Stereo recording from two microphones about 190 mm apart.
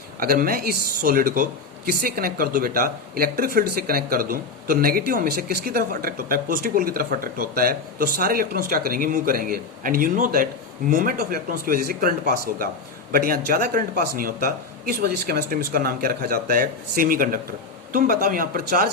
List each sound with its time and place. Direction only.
0.2 s speech: 50° right (ahead or behind)